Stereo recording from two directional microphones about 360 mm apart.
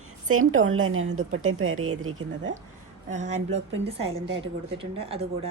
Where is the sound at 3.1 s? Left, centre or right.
Centre.